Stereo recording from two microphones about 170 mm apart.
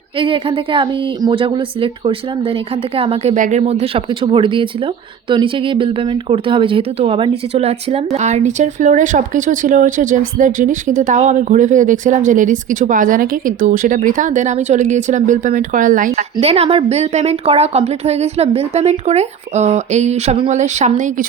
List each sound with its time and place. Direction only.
0.2 s a woman's voice: 30° right (ahead or behind)
3.3 s a woman's voice: 45° right (ahead or behind)
16.4 s a woman's voice: 35° right (ahead or behind)